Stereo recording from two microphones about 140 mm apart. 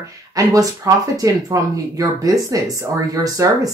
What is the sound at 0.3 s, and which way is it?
Speech, 25° right (ahead or behind).